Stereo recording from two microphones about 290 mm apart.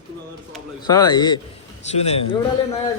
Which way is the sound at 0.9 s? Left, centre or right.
Centre.